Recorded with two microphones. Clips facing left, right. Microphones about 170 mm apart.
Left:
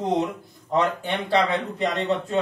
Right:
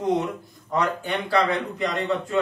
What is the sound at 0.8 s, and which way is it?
Speech, 25° left (ahead or behind).